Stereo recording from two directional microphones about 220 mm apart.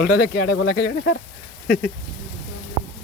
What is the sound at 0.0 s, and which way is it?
Speech, 40° left (ahead or behind).